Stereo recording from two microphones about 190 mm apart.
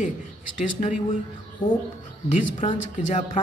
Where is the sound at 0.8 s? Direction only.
40° left (ahead or behind).